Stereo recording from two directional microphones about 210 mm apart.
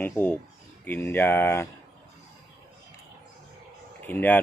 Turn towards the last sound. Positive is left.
turn(degrees=10)  # may be behind; listen again after turning